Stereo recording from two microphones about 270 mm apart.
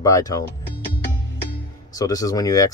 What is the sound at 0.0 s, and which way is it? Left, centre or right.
Speech, centre.